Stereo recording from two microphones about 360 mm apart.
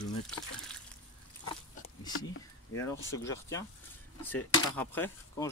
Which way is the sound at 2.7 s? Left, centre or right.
Centre.